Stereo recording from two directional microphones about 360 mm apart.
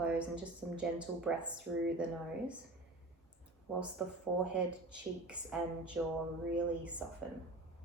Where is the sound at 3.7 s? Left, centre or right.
Centre.